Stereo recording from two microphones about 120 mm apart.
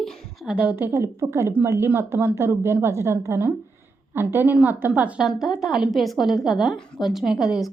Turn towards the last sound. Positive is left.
turn(degrees=-5)  # may be behind; listen again after turning